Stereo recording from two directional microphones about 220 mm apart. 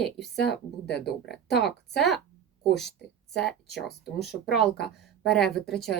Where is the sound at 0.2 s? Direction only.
50° left (ahead or behind).